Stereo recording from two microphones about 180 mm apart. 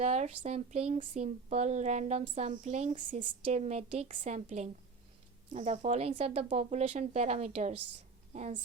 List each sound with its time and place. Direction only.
0.0 s a woman's voice: 40° right (ahead or behind)